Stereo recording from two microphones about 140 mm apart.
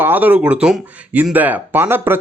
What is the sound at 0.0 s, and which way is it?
Speech, 15° right (ahead or behind).